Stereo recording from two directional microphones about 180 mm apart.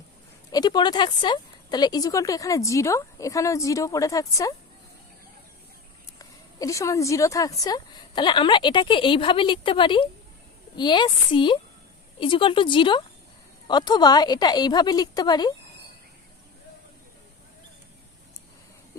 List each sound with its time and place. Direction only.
0.5 s a woman's voice: 20° left (ahead or behind)
6.1 s a woman's voice: 20° left (ahead or behind)